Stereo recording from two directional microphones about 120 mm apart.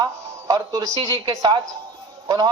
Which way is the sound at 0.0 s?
35° right (ahead or behind).